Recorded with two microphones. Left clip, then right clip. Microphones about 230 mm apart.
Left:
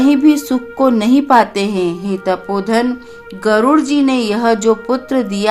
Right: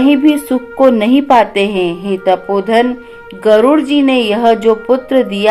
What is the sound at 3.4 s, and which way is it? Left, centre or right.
Speech, left.